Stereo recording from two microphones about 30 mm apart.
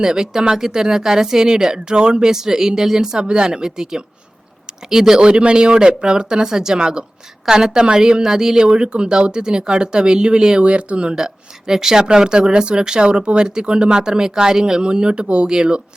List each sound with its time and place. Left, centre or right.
0.0 s speech: centre
2.3 s speech: centre
4.6 s a sound: centre
5.2 s speech: right
10.6 s speech: right
11.1 s speech: centre
14.8 s speech: right